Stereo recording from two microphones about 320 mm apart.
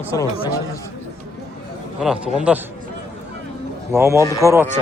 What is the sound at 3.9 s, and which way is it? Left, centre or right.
Speech, centre.